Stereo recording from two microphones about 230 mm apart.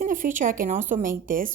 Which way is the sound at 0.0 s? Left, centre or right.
Right.